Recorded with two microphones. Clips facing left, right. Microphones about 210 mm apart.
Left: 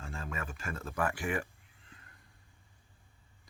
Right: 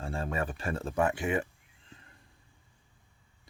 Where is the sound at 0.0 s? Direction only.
30° right (ahead or behind).